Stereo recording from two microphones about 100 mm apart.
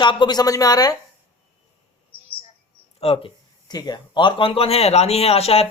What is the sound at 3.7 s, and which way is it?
Speech, 45° left (ahead or behind).